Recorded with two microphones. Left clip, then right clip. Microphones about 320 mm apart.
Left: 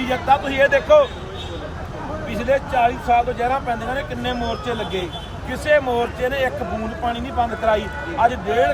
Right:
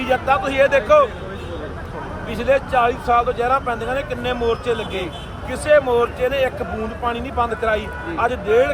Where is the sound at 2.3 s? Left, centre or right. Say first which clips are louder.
Right 2 dB; centre.